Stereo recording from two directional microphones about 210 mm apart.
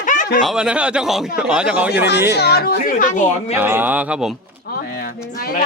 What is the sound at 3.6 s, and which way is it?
Speech, 10° right (ahead or behind).